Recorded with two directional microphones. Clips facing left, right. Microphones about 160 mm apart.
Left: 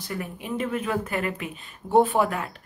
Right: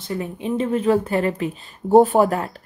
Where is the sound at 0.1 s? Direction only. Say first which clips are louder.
Right 7 dB; 25° right (ahead or behind).